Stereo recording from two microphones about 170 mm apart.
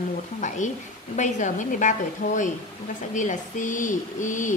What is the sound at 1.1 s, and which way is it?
Speech, 45° left (ahead or behind).